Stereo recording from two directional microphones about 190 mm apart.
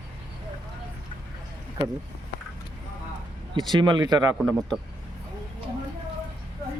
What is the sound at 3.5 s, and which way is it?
Speech, 25° right (ahead or behind).